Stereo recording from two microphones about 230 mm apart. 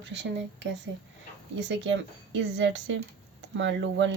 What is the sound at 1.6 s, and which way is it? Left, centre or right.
Speech, right.